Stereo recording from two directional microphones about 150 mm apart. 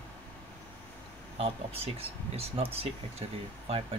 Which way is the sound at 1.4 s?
40° right (ahead or behind).